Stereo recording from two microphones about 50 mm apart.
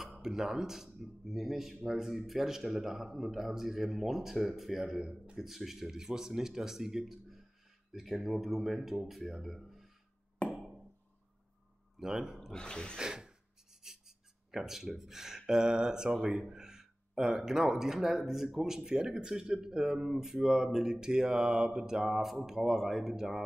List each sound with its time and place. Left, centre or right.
0.2 s a man's voice: centre
5.0 s speech: centre
5.4 s a man's voice: centre
12.0 s speech: centre
12.5 s a sound: centre
13.0 s speech: centre